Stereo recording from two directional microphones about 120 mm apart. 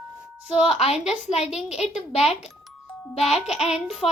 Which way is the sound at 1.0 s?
60° left (ahead or behind).